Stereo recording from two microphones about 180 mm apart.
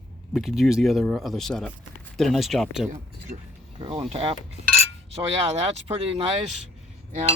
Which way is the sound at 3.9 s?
35° right (ahead or behind).